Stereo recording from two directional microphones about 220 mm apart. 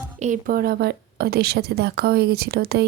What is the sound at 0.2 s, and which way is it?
Speech, 35° right (ahead or behind).